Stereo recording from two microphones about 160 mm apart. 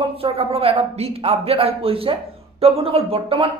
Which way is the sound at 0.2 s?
40° right (ahead or behind).